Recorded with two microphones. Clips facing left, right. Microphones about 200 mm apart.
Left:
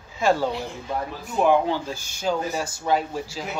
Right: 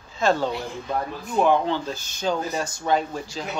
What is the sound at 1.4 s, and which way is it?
Speech, 10° left (ahead or behind).